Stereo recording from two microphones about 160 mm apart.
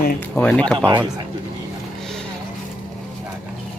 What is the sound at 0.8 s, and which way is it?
Speech, 15° right (ahead or behind).